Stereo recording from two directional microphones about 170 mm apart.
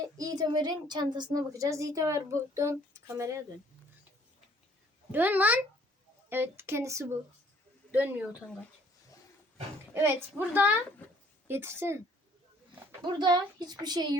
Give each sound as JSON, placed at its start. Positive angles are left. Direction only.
{"t": 0.2, "sound": "a woman's voice", "side_deg": -20}
{"t": 5.1, "sound": "speech", "side_deg": -10}
{"t": 9.9, "sound": "speech", "side_deg": -15}
{"t": 13.0, "sound": "a woman's voice", "side_deg": -25}